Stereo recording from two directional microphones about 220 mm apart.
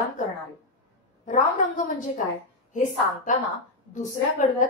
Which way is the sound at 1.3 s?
35° left (ahead or behind).